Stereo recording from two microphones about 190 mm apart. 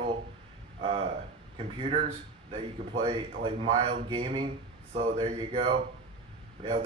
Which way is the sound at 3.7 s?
30° right (ahead or behind).